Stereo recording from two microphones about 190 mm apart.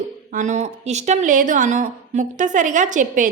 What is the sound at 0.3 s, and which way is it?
A woman's voice, 40° right (ahead or behind).